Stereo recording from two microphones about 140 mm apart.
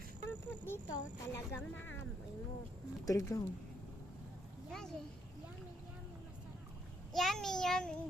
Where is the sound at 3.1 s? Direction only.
25° left (ahead or behind).